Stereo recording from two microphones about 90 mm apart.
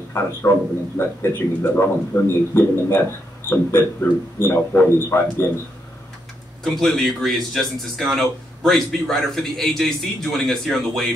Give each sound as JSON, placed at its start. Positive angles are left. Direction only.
{"t": 0.1, "sound": "a man's voice", "side_deg": 30}
{"t": 6.6, "sound": "a man's voice", "side_deg": 5}